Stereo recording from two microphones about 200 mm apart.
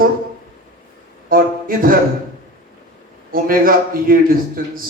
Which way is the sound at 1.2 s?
45° right (ahead or behind).